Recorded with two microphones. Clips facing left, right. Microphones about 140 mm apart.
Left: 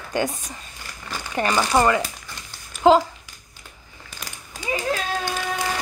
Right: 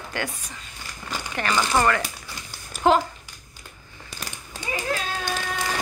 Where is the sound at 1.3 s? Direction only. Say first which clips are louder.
Left 3 dB; 25° left (ahead or behind).